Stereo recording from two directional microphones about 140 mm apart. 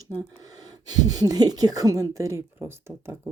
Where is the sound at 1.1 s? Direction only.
25° right (ahead or behind).